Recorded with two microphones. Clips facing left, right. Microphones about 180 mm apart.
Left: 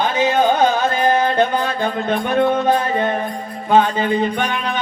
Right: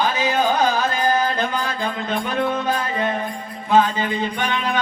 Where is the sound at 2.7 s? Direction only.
35° left (ahead or behind).